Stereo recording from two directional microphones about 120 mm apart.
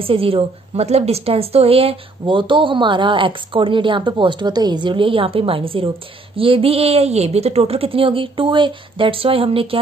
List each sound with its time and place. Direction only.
0.0 s a woman's voice: 50° right (ahead or behind)